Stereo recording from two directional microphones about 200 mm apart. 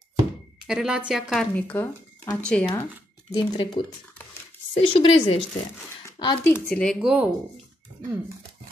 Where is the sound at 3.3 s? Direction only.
20° left (ahead or behind).